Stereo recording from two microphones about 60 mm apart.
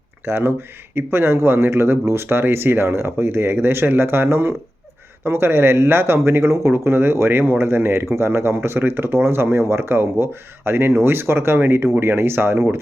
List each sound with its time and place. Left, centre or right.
0.3 s speech: right